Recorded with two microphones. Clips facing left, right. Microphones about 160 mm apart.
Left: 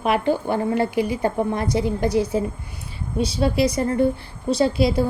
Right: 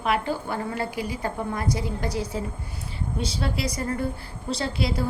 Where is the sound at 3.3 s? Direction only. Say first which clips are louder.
Left 12 dB; 20° left (ahead or behind).